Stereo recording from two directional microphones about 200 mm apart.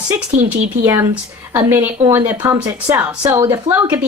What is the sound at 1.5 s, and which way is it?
A woman's voice, 10° right (ahead or behind).